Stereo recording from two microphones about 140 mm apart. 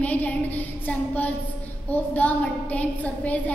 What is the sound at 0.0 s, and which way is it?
A woman's voice, 10° left (ahead or behind).